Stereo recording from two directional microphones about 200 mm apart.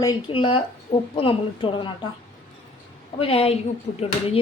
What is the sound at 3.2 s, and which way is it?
Speech, 30° left (ahead or behind).